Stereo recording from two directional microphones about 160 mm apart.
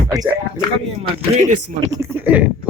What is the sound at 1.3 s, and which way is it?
Speech, 40° right (ahead or behind).